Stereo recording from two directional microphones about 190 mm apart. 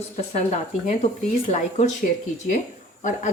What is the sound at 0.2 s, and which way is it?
A woman's voice, 35° left (ahead or behind).